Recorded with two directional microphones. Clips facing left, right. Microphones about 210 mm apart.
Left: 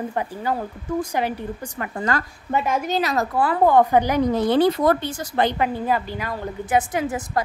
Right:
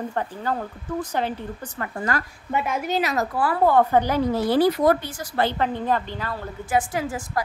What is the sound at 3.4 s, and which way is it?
A woman's voice, 20° left (ahead or behind).